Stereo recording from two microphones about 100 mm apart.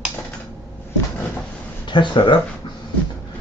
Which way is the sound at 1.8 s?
50° left (ahead or behind).